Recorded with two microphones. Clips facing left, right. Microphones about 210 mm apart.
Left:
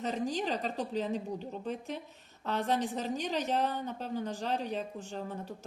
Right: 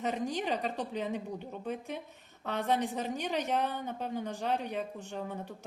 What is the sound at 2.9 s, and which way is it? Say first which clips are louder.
A woman's voice: even; 60° right (ahead or behind).